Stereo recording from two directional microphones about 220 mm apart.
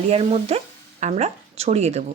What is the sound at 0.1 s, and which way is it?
Speech, 30° right (ahead or behind).